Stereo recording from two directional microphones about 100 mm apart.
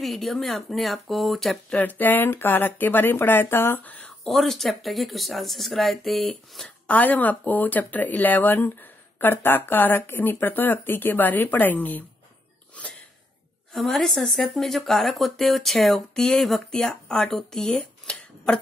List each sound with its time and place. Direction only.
0.0 s speech: centre (ahead or behind)
1.8 s speech: 20° left (ahead or behind)
4.3 s speech: centre (ahead or behind)
6.9 s speech: 15° left (ahead or behind)
13.7 s speech: centre (ahead or behind)